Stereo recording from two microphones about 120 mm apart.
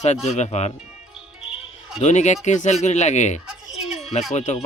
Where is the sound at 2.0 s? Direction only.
75° left (ahead or behind).